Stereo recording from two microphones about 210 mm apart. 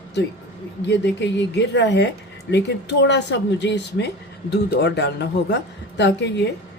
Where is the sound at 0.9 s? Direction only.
55° left (ahead or behind).